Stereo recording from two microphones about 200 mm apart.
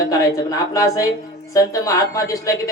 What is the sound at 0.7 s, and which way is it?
Speech, 15° left (ahead or behind).